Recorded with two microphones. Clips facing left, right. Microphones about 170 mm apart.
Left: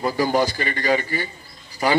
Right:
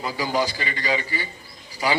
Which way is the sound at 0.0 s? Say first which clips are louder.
Left 5 dB; 50° left (ahead or behind).